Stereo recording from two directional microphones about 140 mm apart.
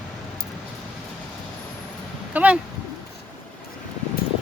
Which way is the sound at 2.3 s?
10° right (ahead or behind).